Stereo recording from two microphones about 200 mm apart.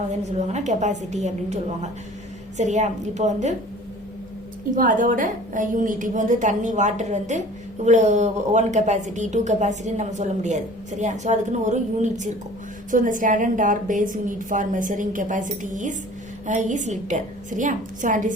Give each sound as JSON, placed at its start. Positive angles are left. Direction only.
{"t": 0.3, "sound": "a woman's voice", "side_deg": -35}
{"t": 4.7, "sound": "a woman's voice", "side_deg": -40}